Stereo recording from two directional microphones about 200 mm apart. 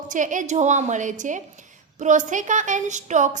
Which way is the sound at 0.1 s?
40° right (ahead or behind).